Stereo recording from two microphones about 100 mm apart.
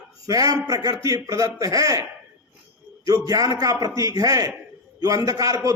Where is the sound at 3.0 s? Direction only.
35° right (ahead or behind).